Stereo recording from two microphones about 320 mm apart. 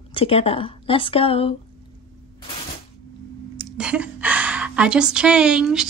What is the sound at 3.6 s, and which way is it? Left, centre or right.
A woman's voice, centre.